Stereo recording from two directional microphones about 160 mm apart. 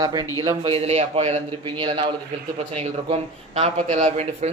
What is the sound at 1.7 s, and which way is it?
A man's voice, 35° right (ahead or behind).